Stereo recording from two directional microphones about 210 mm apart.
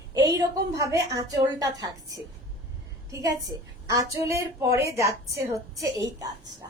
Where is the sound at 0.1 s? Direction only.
20° right (ahead or behind).